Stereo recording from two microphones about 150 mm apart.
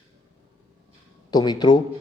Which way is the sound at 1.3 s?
25° left (ahead or behind).